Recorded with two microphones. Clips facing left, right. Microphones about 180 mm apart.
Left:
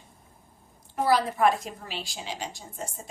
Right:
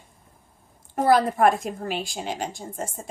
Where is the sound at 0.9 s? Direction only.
50° right (ahead or behind).